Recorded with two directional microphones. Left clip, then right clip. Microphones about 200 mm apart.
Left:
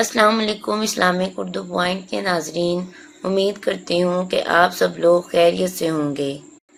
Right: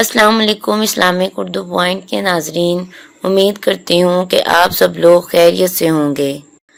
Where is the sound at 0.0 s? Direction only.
45° right (ahead or behind).